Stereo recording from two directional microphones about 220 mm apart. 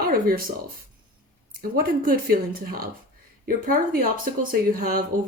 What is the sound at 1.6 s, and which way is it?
Speech, 40° right (ahead or behind).